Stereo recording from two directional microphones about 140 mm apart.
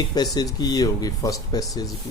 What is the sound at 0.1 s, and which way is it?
Speech, 30° left (ahead or behind).